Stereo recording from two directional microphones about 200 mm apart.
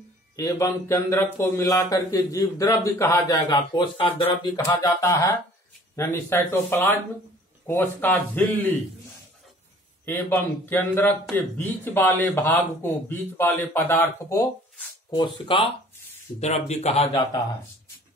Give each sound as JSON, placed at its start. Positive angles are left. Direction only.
{"t": 0.4, "sound": "speech", "side_deg": 15}
{"t": 10.0, "sound": "speech", "side_deg": 10}
{"t": 15.0, "sound": "speech", "side_deg": 25}
{"t": 17.1, "sound": "speech", "side_deg": 20}